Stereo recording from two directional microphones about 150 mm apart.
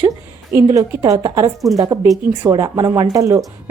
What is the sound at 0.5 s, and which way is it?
A woman's voice, 20° right (ahead or behind).